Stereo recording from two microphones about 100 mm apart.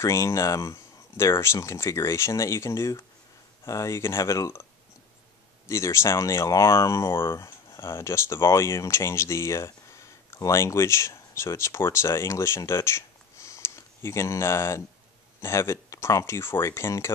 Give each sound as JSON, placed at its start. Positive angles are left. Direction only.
{"t": 0.0, "sound": "speech", "side_deg": 30}
{"t": 5.7, "sound": "speech", "side_deg": 30}